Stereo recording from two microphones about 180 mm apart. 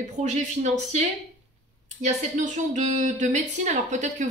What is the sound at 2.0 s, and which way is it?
A woman's voice, 40° right (ahead or behind).